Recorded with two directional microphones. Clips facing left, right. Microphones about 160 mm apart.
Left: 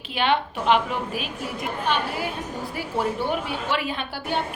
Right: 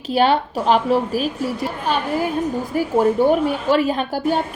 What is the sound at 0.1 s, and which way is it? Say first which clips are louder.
A woman's voice: right 7 dB; 40° right (ahead or behind).